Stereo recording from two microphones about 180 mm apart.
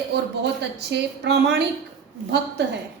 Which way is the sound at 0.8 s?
70° right (ahead or behind).